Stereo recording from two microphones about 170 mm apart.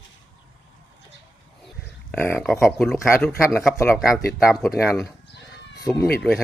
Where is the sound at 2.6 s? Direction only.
Centre (ahead or behind).